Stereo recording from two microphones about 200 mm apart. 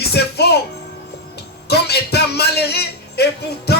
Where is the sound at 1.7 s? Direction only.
55° left (ahead or behind).